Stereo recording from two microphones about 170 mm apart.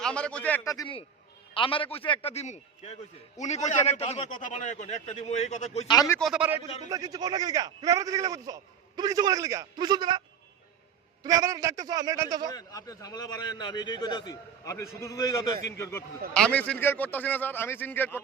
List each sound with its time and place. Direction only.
0.0 s a man's voice: 5° left (ahead or behind)
0.6 s a man's voice: 20° left (ahead or behind)
1.5 s a man's voice: 30° left (ahead or behind)
5.9 s a man's voice: 20° left (ahead or behind)
6.1 s a man's voice: centre (ahead or behind)
6.8 s a man's voice: 20° right (ahead or behind)
12.5 s a man's voice: 20° left (ahead or behind)